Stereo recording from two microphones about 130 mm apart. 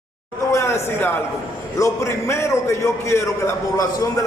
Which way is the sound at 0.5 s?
20° left (ahead or behind).